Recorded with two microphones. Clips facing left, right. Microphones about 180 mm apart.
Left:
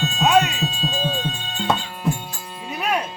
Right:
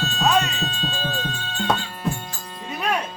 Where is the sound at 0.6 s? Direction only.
5° left (ahead or behind).